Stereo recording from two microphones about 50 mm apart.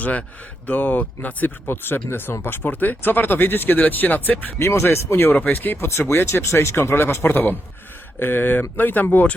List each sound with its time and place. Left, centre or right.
0.0 s speech: left
1.6 s a man's voice: left
4.6 s speech: left
5.4 s speech: left
5.7 s speech: left
6.9 s a man's voice: left